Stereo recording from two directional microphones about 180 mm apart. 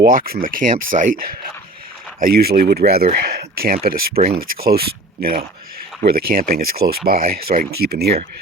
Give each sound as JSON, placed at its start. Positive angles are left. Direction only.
{"t": 0.0, "sound": "speech", "side_deg": -55}
{"t": 2.5, "sound": "speech", "side_deg": -55}